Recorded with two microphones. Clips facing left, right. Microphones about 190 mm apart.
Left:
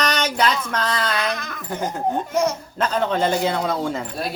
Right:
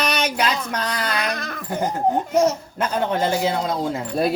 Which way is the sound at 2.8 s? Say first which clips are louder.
Left 3 dB; 10° right (ahead or behind).